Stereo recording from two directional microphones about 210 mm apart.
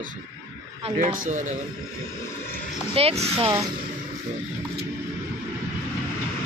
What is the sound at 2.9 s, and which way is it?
Speech, 30° right (ahead or behind).